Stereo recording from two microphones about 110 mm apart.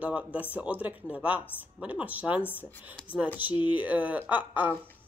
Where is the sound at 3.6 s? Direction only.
15° right (ahead or behind).